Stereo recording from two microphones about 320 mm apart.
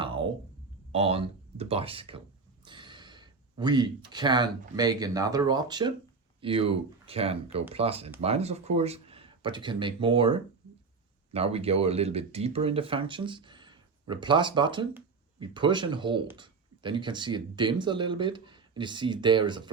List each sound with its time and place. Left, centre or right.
0.0 s a sound: centre
0.9 s speech: centre
2.6 s gasp: centre
4.1 s speech: centre